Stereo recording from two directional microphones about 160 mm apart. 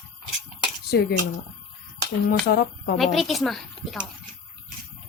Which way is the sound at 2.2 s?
70° left (ahead or behind).